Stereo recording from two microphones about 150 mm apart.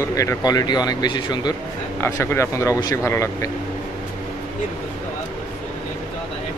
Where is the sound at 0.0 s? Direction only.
20° left (ahead or behind).